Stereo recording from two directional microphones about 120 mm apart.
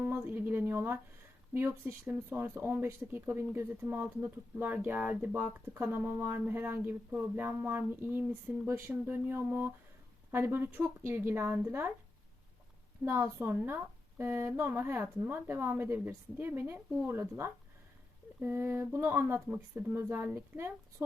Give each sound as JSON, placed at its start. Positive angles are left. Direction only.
{"t": 0.0, "sound": "a woman's voice", "side_deg": -15}
{"t": 13.1, "sound": "a woman's voice", "side_deg": -20}